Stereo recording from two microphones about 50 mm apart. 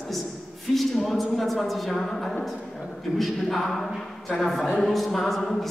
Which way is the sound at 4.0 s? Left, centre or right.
Centre.